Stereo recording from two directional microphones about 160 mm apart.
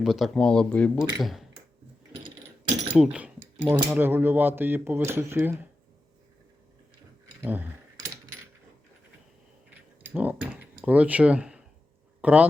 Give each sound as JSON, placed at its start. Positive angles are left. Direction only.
{"t": 0.0, "sound": "speech", "side_deg": 0}
{"t": 2.9, "sound": "speech", "side_deg": -5}
{"t": 3.6, "sound": "speech", "side_deg": -20}
{"t": 7.4, "sound": "speech", "side_deg": -10}
{"t": 9.6, "sound": "keys jangling", "side_deg": -10}
{"t": 10.8, "sound": "speech", "side_deg": -10}